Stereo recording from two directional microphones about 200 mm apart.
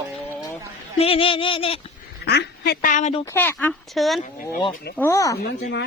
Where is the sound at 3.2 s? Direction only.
10° left (ahead or behind).